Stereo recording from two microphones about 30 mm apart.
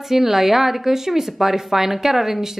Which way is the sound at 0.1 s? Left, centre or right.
Centre.